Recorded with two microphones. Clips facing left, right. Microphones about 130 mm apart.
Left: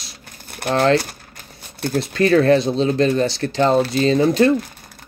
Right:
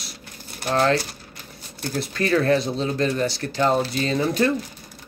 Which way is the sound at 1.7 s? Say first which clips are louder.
Left 6 dB; 60° left (ahead or behind).